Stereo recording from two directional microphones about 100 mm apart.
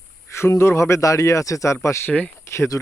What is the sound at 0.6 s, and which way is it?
Speech, 30° left (ahead or behind).